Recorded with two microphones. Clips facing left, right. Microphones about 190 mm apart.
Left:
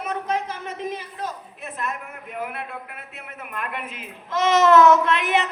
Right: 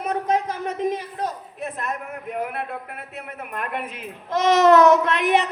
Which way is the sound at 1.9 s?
40° right (ahead or behind).